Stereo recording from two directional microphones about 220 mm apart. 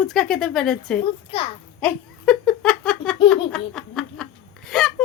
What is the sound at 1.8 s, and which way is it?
Giggle, 5° left (ahead or behind).